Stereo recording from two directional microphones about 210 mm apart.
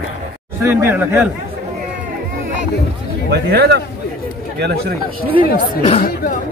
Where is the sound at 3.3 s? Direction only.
50° right (ahead or behind).